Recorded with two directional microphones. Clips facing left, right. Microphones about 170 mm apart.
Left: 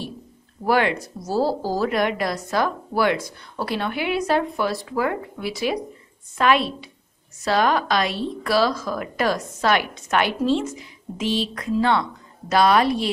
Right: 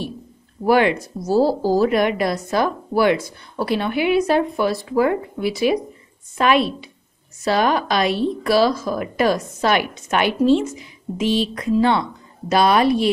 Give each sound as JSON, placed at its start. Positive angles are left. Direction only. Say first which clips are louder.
{"t": 0.7, "sound": "a woman's voice", "louder": "right 4 dB", "side_deg": -15}